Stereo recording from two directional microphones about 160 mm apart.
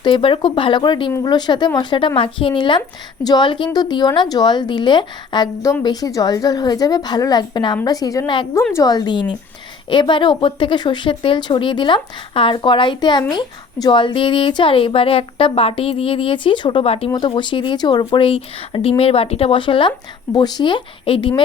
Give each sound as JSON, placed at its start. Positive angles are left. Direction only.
{"t": 0.0, "sound": "a woman's voice", "side_deg": 30}